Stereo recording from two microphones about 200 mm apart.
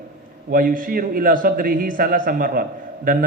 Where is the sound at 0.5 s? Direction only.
45° right (ahead or behind).